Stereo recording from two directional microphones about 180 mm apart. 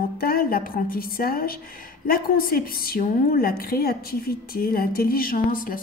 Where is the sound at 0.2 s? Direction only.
55° left (ahead or behind).